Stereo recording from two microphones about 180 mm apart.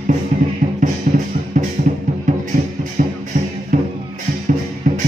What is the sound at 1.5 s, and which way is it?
Music, 45° right (ahead or behind).